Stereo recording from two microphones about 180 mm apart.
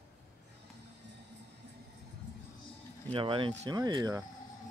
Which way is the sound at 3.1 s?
30° right (ahead or behind).